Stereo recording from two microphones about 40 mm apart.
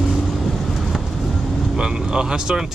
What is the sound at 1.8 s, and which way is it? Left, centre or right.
Speech, centre.